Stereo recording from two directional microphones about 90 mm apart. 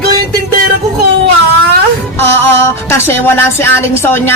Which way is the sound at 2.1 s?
25° left (ahead or behind).